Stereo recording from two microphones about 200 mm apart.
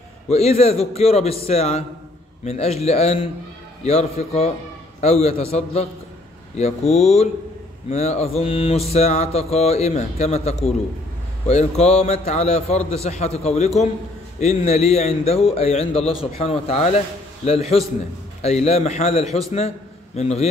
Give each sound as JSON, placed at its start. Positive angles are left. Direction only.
{"t": 0.3, "sound": "mantra", "side_deg": 30}
{"t": 16.3, "sound": "speech", "side_deg": 30}
{"t": 17.5, "sound": "mantra", "side_deg": 30}